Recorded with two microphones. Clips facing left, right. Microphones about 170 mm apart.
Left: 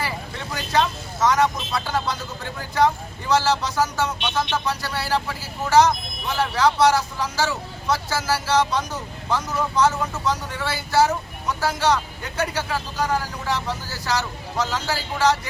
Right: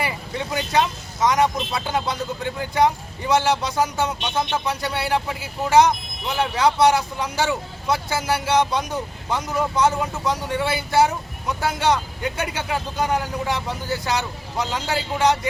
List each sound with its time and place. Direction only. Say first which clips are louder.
0.0 s speech: right 3 dB; 20° right (ahead or behind)